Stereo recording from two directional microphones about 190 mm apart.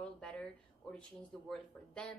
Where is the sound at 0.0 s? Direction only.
5° left (ahead or behind).